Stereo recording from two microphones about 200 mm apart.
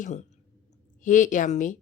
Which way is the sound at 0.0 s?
35° left (ahead or behind).